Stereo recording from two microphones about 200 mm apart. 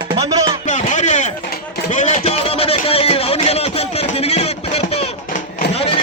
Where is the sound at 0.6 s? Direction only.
35° left (ahead or behind).